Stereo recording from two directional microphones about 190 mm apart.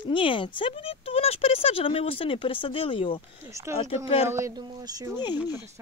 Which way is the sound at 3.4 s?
15° right (ahead or behind).